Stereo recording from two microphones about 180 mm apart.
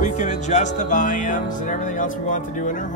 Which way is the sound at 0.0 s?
40° left (ahead or behind).